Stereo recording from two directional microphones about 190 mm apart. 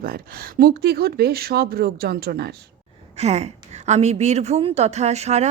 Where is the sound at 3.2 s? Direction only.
35° right (ahead or behind).